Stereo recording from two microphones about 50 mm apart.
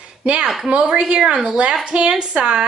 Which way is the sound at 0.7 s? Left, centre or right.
Right.